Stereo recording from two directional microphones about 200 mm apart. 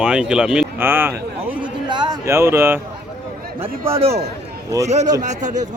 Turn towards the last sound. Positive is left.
turn(degrees=-40)  # may be behind; listen again after turning